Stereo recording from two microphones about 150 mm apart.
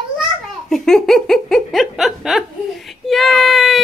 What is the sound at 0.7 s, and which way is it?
Speech, 5° left (ahead or behind).